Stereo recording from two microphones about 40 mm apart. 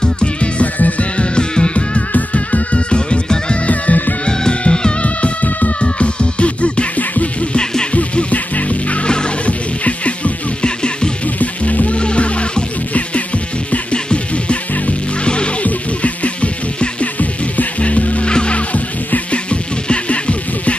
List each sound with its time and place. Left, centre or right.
0.0 s music: left
0.7 s music: left
1.3 s music: left
2.1 s music: left
3.6 s music: left
4.3 s music: left
5.0 s music: left
5.8 s music: left
10.6 s music: left
11.3 s music: left